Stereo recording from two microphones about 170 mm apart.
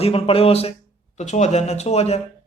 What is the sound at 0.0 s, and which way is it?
Speech, 35° left (ahead or behind).